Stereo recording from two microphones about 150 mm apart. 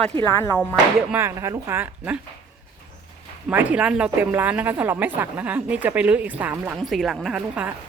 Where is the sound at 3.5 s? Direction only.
10° right (ahead or behind).